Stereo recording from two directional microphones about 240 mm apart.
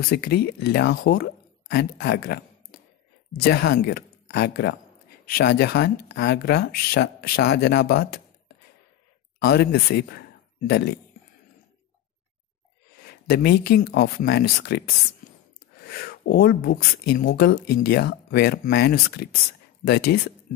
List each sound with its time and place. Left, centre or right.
0.1 s speech: left
13.3 s speech: left